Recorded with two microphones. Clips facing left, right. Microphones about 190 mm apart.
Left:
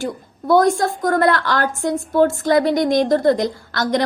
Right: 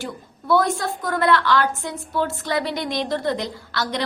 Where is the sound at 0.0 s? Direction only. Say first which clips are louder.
Left 7 dB; 45° left (ahead or behind).